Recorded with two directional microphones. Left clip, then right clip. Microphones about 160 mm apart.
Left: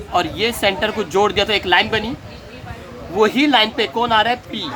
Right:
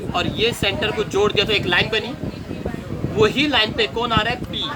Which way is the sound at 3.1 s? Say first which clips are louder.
Left 3 dB; 90° left.